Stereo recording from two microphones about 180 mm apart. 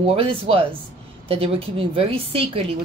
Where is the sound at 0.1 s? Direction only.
30° right (ahead or behind).